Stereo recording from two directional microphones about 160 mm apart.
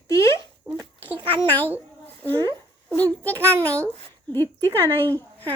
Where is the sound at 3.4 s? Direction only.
10° left (ahead or behind).